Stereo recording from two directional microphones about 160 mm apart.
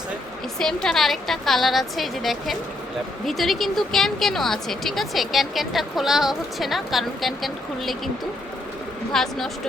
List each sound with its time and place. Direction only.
0.6 s speech: 5° left (ahead or behind)
9.1 s speech: centre (ahead or behind)